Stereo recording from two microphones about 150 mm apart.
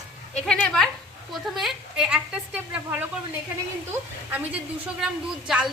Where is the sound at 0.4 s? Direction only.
5° left (ahead or behind).